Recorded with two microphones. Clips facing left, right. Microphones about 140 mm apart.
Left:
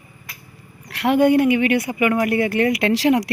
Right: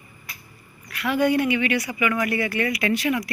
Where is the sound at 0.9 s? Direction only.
65° left (ahead or behind).